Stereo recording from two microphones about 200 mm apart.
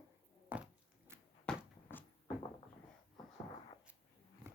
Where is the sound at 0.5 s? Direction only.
10° right (ahead or behind).